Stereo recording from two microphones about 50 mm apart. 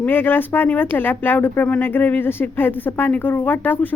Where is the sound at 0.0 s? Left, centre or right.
Left.